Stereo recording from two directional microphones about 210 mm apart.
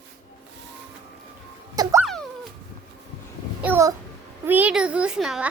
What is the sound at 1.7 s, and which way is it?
Music, 15° right (ahead or behind).